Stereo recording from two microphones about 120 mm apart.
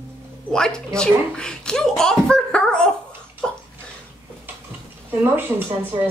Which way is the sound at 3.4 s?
5° left (ahead or behind).